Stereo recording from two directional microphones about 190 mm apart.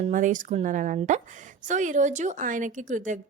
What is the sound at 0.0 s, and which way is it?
A woman's voice, 40° right (ahead or behind).